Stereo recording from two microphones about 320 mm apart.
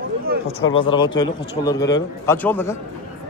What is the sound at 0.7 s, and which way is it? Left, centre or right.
A man's voice, centre.